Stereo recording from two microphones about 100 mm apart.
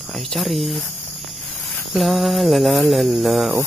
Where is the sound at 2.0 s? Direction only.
Centre (ahead or behind).